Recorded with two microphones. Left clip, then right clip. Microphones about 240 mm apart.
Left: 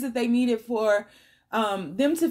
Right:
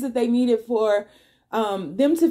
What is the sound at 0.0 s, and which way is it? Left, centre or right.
Speech, left.